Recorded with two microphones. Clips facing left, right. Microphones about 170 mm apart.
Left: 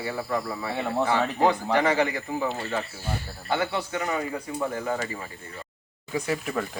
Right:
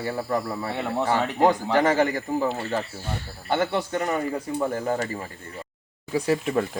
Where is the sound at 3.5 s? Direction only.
45° right (ahead or behind); by 6.7 s 30° right (ahead or behind).